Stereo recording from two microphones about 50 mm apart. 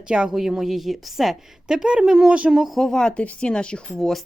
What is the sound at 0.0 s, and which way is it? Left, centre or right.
A woman's voice, centre.